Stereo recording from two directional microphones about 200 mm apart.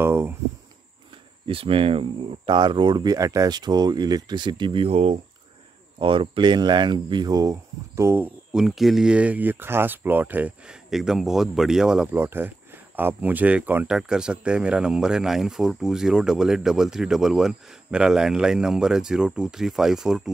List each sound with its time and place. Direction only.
0.0 s speech: 10° right (ahead or behind)
1.5 s speech: 25° right (ahead or behind); by 20.2 s 5° right (ahead or behind)